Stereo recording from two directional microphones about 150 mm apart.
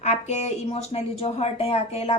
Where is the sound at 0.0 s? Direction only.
45° left (ahead or behind).